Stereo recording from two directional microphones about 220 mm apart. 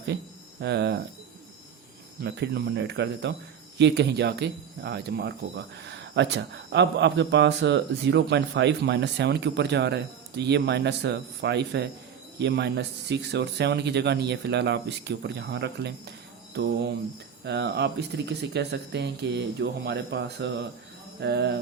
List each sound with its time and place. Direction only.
0.6 s speech: 50° right (ahead or behind)
2.2 s speech: 50° right (ahead or behind)
17.4 s speech: 50° right (ahead or behind)